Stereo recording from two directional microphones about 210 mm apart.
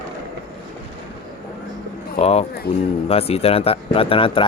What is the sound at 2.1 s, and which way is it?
Speech, 30° left (ahead or behind).